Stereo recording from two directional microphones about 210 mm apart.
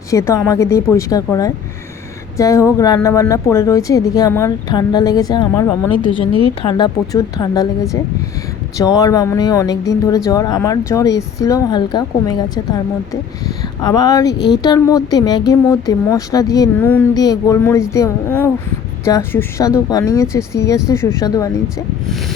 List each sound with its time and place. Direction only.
0.1 s a woman's voice: 15° left (ahead or behind)
8.8 s a woman's voice: 15° left (ahead or behind)
13.8 s a woman's voice: 20° left (ahead or behind)